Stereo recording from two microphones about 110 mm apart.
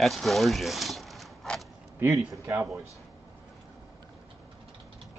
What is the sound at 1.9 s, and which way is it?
Speech, 25° right (ahead or behind).